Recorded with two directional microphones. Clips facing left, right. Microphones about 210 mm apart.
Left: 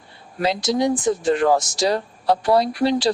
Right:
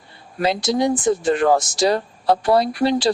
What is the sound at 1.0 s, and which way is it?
A woman's voice, 55° right (ahead or behind).